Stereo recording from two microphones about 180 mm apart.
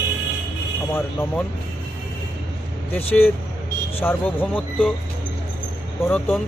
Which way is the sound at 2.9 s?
10° left (ahead or behind).